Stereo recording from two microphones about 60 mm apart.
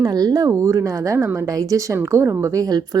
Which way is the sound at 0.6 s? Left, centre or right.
Right.